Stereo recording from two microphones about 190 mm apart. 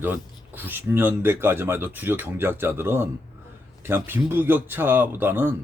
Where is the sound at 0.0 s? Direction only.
10° right (ahead or behind).